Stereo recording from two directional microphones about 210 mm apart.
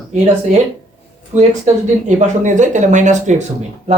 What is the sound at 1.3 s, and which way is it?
Speech, 35° right (ahead or behind).